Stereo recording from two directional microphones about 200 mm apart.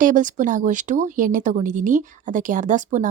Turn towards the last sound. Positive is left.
turn(degrees=-40)  # may be behind; listen again after turning